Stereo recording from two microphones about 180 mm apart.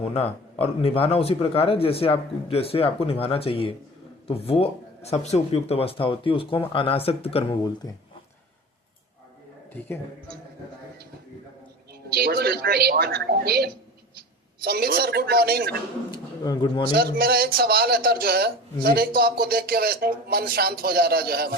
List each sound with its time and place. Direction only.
0.0 s speech: 35° left (ahead or behind)
12.0 s a man's voice: 60° right (ahead or behind)
16.1 s a man's voice: 25° left (ahead or behind)
16.9 s a man's voice: 60° right (ahead or behind)